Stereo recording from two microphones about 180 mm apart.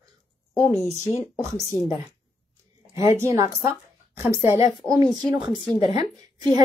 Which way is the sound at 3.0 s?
15° right (ahead or behind).